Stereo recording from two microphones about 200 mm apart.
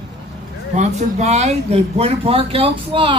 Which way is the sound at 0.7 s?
35° right (ahead or behind).